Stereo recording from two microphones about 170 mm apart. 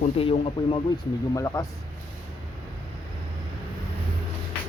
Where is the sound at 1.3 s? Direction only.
20° left (ahead or behind).